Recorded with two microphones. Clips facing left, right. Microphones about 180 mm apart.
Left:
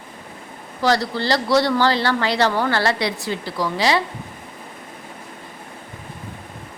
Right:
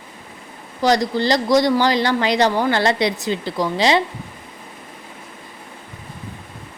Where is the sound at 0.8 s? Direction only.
15° right (ahead or behind).